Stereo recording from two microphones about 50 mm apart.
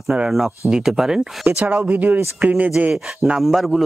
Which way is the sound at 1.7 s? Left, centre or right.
Right.